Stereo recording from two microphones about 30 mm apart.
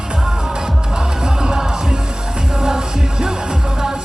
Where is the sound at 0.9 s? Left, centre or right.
Right.